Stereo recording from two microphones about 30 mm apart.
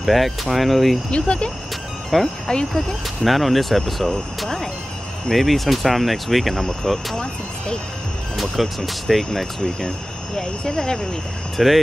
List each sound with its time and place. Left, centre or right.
0.1 s speech: centre
1.1 s speech: left
2.1 s speech: centre
2.5 s speech: left
3.3 s speech: centre
5.3 s speech: centre
8.4 s speech: centre
10.3 s speech: left
10.7 s speech: centre
11.5 s speech: centre